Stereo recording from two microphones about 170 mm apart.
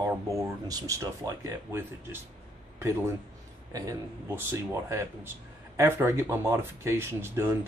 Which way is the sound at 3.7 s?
20° right (ahead or behind).